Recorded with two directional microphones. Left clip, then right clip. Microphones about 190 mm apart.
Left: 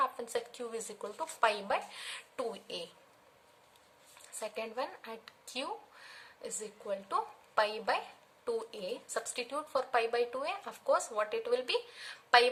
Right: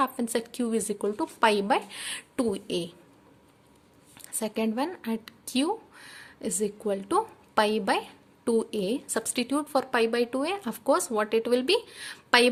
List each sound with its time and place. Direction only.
0.0 s speech: 50° right (ahead or behind)
4.4 s speech: 50° right (ahead or behind)